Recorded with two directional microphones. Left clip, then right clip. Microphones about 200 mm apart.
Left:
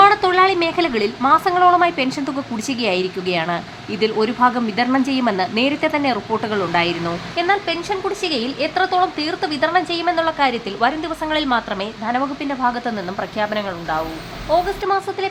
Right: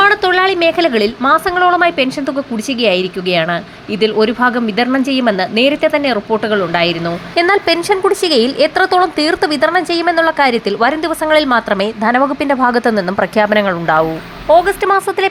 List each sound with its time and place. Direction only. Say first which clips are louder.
0.0 s a woman's voice: right 2 dB; 15° right (ahead or behind)
7.3 s a woman's voice: right 7 dB; 35° right (ahead or behind)
14.5 s speech: right 8 dB; 25° right (ahead or behind)